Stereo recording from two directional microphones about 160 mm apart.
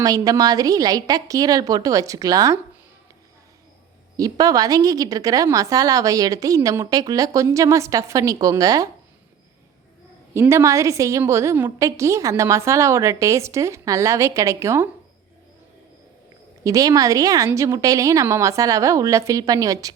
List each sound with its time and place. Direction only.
0.0 s a woman's voice: 20° right (ahead or behind)
4.2 s a woman's voice: 20° right (ahead or behind)
10.3 s a woman's voice: 15° right (ahead or behind)
16.6 s a woman's voice: 20° right (ahead or behind)